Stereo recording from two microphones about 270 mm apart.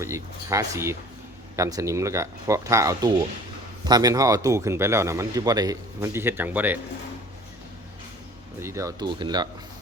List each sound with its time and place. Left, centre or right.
0.0 s a man's voice: centre
8.5 s a man's voice: centre